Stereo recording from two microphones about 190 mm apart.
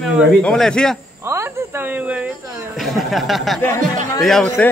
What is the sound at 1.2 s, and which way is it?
A man's voice, 15° right (ahead or behind).